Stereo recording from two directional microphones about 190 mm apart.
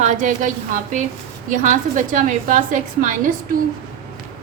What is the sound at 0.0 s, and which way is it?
A woman's voice, 40° right (ahead or behind).